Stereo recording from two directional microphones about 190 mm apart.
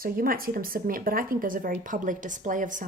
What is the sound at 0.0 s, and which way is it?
A woman's voice, 50° right (ahead or behind).